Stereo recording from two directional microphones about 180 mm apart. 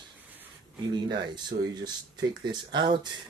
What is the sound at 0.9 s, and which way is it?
Speech, 25° right (ahead or behind).